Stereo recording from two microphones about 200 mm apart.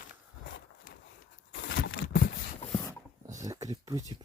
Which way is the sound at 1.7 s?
60° left (ahead or behind).